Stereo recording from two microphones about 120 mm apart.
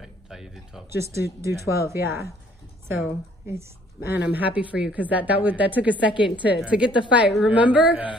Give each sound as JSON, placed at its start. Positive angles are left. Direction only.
{"t": 0.0, "sound": "speech", "side_deg": 0}
{"t": 0.8, "sound": "speech", "side_deg": -25}
{"t": 3.4, "sound": "speech", "side_deg": -20}